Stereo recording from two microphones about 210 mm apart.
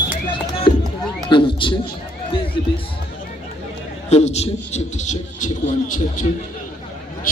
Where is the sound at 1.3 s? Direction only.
25° left (ahead or behind).